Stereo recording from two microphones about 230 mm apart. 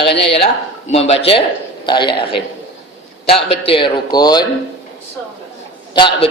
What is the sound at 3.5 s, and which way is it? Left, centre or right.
Speech, left.